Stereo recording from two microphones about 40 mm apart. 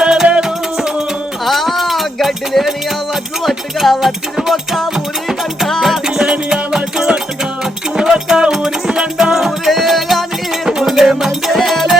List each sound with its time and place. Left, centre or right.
0.0 s music: centre
1.5 s music: centre
11.5 s music: centre